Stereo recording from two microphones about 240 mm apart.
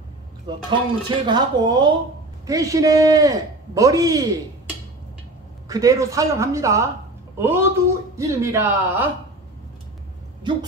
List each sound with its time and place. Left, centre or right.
0.7 s a man's voice: centre
5.7 s a man's voice: centre